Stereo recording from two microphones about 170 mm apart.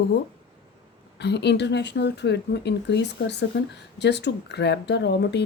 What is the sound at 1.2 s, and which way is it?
Speech, 85° left.